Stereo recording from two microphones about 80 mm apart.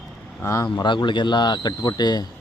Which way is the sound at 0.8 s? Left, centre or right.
Left.